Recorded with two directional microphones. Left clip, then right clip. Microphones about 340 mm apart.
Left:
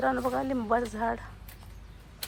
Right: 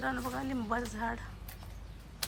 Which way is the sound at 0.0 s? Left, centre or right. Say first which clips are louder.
Left 8 dB; centre.